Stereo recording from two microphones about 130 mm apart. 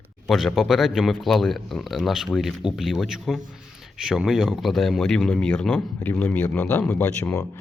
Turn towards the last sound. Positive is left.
turn(degrees=15)  # may be behind; listen again after turning